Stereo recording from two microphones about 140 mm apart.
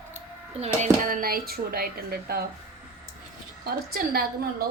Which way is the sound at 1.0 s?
90° right.